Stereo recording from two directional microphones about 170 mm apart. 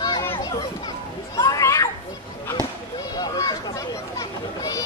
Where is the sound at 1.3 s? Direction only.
20° left (ahead or behind).